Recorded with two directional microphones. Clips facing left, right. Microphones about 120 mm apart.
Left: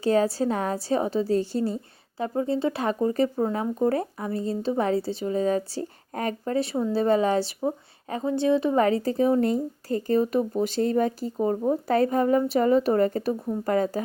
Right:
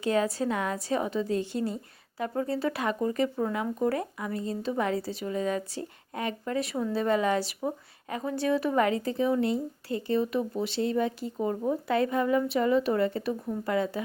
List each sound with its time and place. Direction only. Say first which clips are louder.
0.0 s a woman's voice: left 4 dB; 35° left (ahead or behind)